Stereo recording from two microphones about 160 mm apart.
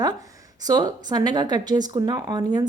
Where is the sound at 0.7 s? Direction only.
25° right (ahead or behind).